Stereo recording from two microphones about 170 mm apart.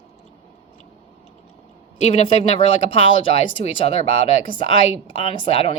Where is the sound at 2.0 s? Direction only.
35° left (ahead or behind).